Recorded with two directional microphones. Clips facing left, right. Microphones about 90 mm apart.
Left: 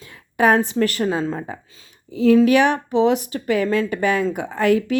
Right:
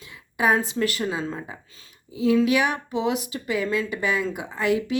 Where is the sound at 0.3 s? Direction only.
50° left (ahead or behind).